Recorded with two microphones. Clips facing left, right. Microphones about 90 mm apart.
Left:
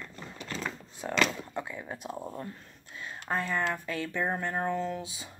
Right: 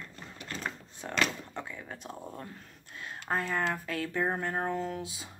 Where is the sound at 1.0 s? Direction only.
5° left (ahead or behind).